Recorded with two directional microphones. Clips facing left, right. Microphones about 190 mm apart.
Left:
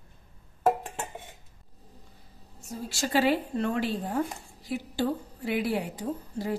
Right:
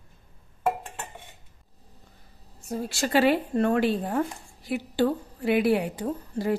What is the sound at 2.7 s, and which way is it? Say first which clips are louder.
A woman's voice: right 4 dB; 65° right (ahead or behind).